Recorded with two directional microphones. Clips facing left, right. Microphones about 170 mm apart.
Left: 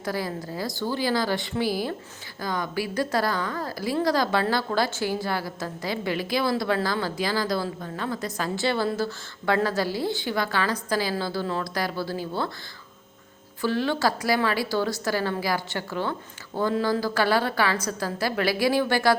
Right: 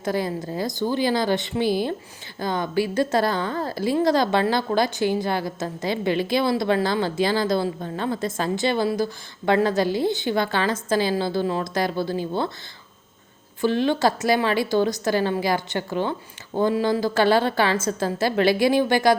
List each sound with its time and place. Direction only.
0.0 s a woman's voice: 20° right (ahead or behind)
13.6 s a woman's voice: 20° right (ahead or behind)